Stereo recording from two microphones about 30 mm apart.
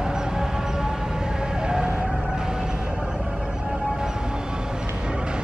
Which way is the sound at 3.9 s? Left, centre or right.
Right.